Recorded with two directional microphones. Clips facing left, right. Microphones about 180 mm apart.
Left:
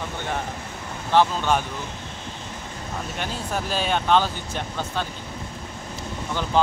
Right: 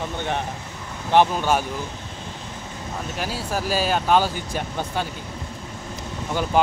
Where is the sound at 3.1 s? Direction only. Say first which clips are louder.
Right 2 dB; 5° right (ahead or behind).